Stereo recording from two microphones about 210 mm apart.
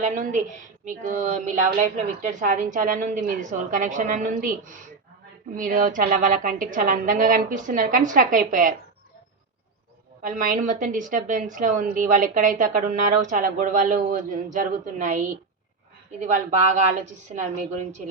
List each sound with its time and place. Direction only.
0.0 s a woman's voice: 35° right (ahead or behind)
10.2 s a woman's voice: 40° right (ahead or behind)